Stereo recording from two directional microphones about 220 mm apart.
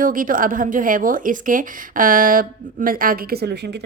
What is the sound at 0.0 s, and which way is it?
A woman's voice, 40° right (ahead or behind).